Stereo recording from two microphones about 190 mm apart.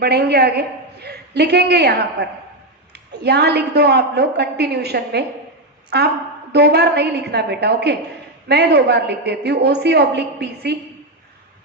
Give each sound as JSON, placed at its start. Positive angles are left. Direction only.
{"t": 0.0, "sound": "a woman's voice", "side_deg": -60}